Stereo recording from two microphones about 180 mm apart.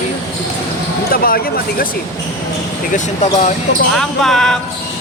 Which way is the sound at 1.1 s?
55° left (ahead or behind).